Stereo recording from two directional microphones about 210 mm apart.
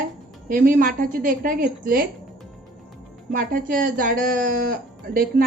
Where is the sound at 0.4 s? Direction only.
40° right (ahead or behind).